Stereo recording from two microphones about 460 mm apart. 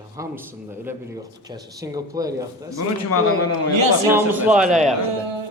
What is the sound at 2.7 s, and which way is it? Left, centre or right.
Speech, left.